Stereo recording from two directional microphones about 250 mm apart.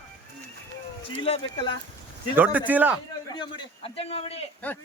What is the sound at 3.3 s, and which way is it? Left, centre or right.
A man's voice, centre.